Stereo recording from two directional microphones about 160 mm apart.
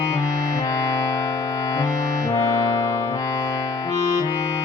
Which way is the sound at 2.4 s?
20° left (ahead or behind).